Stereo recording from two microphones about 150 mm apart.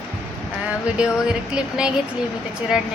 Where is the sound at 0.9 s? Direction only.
5° right (ahead or behind).